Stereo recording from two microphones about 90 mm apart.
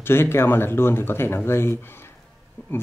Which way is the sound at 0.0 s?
25° left (ahead or behind).